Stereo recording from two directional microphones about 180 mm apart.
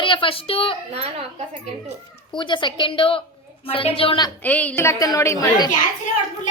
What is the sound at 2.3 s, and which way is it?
A woman's voice, 25° left (ahead or behind).